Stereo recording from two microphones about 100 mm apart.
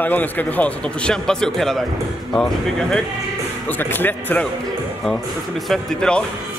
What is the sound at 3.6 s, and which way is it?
Speech, 20° left (ahead or behind).